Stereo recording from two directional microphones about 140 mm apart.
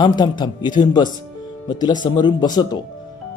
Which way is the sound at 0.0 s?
30° left (ahead or behind).